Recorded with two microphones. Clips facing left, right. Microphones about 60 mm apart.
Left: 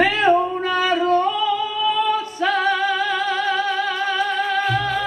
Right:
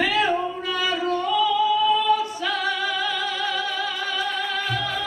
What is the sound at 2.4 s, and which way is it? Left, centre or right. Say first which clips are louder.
Music: left 6 dB; left.